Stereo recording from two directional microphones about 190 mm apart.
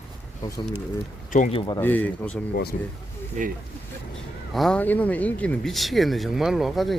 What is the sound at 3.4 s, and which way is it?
Speech, 40° right (ahead or behind).